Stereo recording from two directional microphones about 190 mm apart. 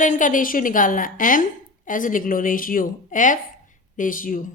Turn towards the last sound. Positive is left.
turn(degrees=45)  # may be behind; listen again after turning